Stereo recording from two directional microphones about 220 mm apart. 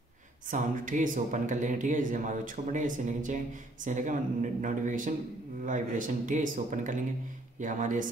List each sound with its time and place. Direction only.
0.5 s a man's voice: 35° right (ahead or behind)